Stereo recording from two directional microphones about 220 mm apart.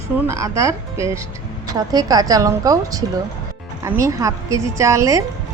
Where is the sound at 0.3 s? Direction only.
15° right (ahead or behind).